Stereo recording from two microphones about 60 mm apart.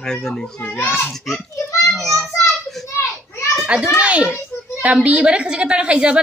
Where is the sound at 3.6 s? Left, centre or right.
Centre.